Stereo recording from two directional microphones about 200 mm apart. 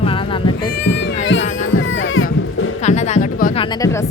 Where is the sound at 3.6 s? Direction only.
20° left (ahead or behind).